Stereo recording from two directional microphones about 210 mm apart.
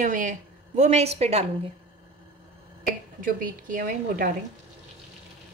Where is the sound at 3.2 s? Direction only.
40° right (ahead or behind).